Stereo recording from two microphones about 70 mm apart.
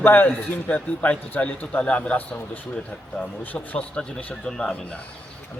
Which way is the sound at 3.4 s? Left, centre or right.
Left.